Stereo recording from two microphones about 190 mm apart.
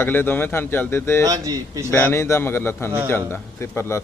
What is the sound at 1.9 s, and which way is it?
A man's voice, 10° left (ahead or behind).